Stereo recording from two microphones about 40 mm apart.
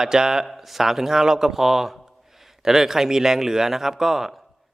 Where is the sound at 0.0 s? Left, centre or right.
Centre.